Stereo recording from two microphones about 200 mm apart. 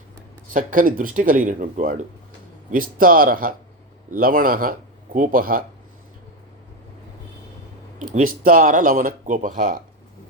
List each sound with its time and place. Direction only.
0.5 s speech: 45° right (ahead or behind)
7.9 s a sound: 40° right (ahead or behind)
8.4 s speech: 40° right (ahead or behind)